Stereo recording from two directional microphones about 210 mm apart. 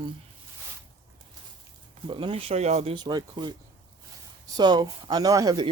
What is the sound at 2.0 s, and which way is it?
Speech, 25° right (ahead or behind).